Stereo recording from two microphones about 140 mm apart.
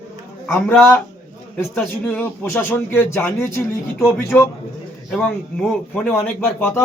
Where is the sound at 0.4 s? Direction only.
15° left (ahead or behind).